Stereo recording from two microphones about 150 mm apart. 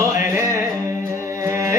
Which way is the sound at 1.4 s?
20° right (ahead or behind).